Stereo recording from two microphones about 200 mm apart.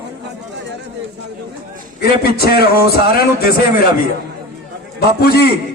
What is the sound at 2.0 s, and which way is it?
A man's voice, 50° left (ahead or behind).